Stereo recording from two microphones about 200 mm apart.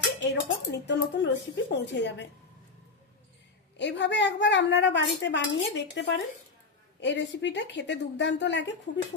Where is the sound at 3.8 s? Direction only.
60° left (ahead or behind).